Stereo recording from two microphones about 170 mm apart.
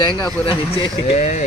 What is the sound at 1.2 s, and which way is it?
Speech, 45° left (ahead or behind).